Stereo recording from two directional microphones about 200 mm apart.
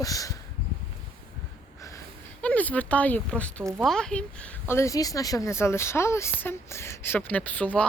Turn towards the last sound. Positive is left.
turn(degrees=10)  # may be behind; listen again after turning